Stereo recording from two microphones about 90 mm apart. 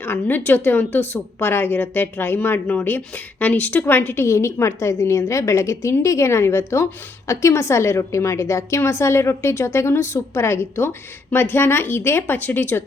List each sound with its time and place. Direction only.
0.0 s a woman's voice: 25° left (ahead or behind)